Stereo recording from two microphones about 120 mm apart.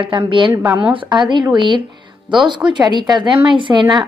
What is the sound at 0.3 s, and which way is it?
A woman's voice, 45° right (ahead or behind).